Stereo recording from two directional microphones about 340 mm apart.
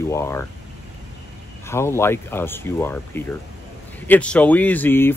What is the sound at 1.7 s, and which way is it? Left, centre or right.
Speech, centre.